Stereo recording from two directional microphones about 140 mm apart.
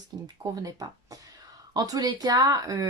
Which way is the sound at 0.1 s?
30° right (ahead or behind).